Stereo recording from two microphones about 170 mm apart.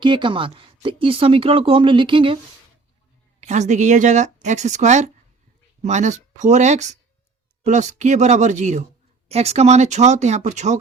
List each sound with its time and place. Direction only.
0.0 s speech: 30° right (ahead or behind)
3.4 s speech: 45° right (ahead or behind)